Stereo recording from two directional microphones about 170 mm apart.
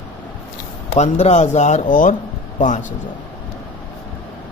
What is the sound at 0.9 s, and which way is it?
Speech, 40° left (ahead or behind).